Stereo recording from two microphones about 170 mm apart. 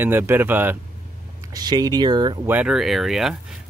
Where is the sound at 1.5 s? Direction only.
25° right (ahead or behind).